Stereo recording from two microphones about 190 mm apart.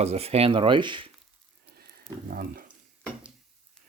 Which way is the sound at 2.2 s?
50° right (ahead or behind).